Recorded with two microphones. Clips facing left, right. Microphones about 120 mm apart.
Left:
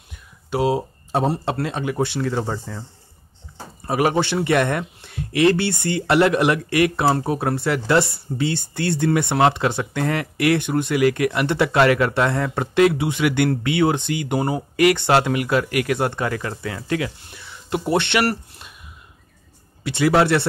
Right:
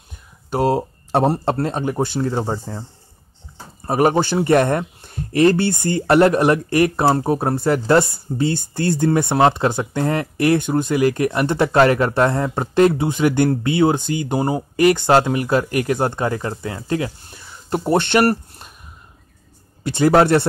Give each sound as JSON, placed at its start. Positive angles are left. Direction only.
{"t": 0.5, "sound": "speech", "side_deg": -45}
{"t": 1.1, "sound": "speech", "side_deg": -60}
{"t": 2.2, "sound": "speech", "side_deg": -25}
{"t": 3.8, "sound": "speech", "side_deg": -35}
{"t": 12.7, "sound": "speech", "side_deg": -40}
{"t": 19.8, "sound": "speech", "side_deg": -45}